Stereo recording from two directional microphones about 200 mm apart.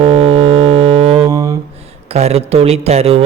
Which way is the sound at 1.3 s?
15° right (ahead or behind).